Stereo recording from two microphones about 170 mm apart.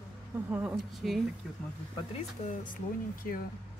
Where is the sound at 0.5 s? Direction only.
10° right (ahead or behind).